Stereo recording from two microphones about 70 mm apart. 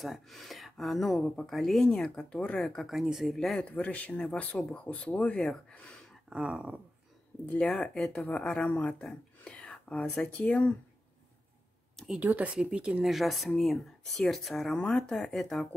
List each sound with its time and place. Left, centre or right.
0.0 s speech: centre
3.3 s speech: centre
5.4 s speech: centre
6.3 s speech: centre
7.6 s speech: centre
12.2 s speech: right
13.0 s speech: centre